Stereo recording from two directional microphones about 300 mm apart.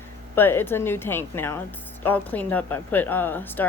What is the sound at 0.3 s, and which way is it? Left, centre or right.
Speech, centre.